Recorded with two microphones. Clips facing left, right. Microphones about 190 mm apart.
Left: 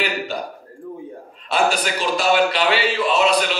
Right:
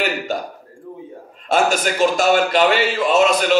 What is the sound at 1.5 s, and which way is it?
A man's voice, 45° right (ahead or behind).